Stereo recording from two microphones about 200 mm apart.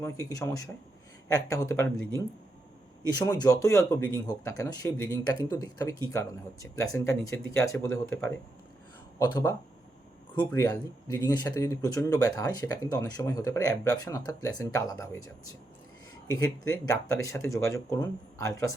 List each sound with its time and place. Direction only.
0.0 s speech: 15° left (ahead or behind)
3.2 s speech: 20° left (ahead or behind)